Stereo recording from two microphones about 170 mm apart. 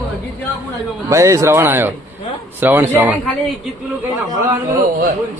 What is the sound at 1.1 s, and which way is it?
Speech, 20° right (ahead or behind).